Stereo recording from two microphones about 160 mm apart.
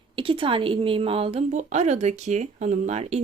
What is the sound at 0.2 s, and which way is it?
A woman's voice, 35° right (ahead or behind).